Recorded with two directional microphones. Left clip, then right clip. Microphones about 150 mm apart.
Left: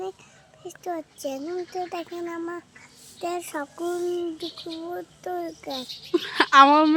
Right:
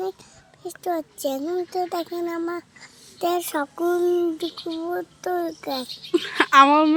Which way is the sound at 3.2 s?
40° right (ahead or behind).